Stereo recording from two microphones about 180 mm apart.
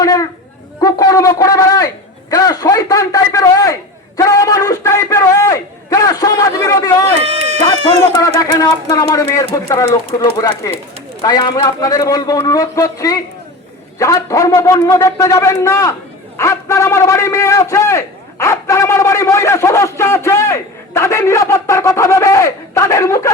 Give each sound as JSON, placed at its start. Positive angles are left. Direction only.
{"t": 0.0, "sound": "a sound", "side_deg": 20}
{"t": 0.8, "sound": "a man's voice", "side_deg": 20}
{"t": 7.3, "sound": "run", "side_deg": -35}
{"t": 8.1, "sound": "a man's voice", "side_deg": 20}